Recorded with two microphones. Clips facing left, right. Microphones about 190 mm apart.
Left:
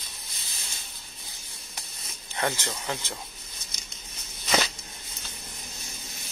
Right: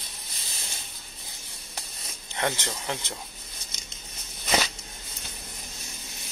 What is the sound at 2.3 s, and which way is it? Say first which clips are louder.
Speech: even; 20° right (ahead or behind).